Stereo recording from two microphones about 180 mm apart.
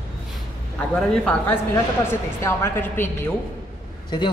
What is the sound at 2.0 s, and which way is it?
A woman's voice, 15° left (ahead or behind).